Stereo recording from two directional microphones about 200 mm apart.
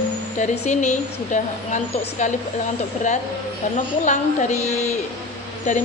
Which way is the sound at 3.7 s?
35° left (ahead or behind).